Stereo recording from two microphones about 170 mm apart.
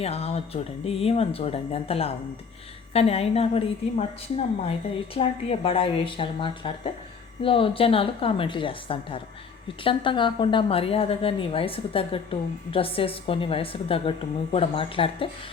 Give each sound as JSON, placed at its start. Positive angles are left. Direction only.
{"t": 0.0, "sound": "a woman's voice", "side_deg": 35}
{"t": 5.1, "sound": "a woman's voice", "side_deg": 35}